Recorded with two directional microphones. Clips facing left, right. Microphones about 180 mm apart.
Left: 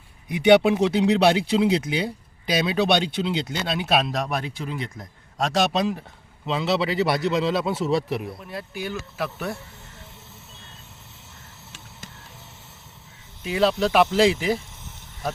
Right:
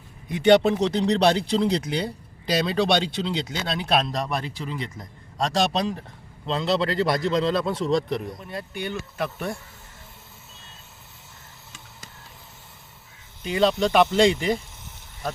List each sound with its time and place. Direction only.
0.3 s speech: 10° left (ahead or behind)
13.4 s speech: centre (ahead or behind)